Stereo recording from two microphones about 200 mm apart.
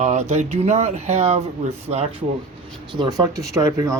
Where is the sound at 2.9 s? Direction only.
20° right (ahead or behind).